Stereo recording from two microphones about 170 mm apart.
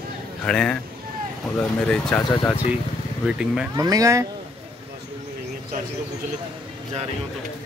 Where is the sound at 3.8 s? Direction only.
20° right (ahead or behind).